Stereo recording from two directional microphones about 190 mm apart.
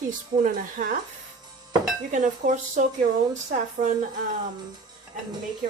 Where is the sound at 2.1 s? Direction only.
40° right (ahead or behind).